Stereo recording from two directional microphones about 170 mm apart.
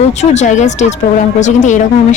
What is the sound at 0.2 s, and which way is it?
A woman's voice, 45° left (ahead or behind).